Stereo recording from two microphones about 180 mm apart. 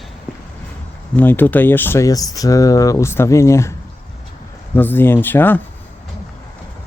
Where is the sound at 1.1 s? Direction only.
10° left (ahead or behind).